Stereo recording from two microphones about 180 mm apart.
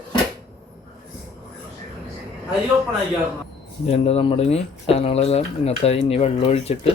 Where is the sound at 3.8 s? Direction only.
35° left (ahead or behind).